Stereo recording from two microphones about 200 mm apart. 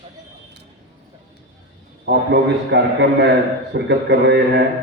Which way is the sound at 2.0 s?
55° right (ahead or behind).